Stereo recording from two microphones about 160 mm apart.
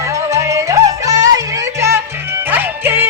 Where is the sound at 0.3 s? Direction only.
20° right (ahead or behind).